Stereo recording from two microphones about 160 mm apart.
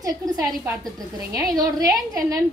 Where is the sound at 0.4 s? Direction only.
Centre (ahead or behind).